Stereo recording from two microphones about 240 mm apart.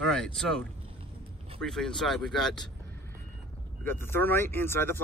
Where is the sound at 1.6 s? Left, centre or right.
Centre.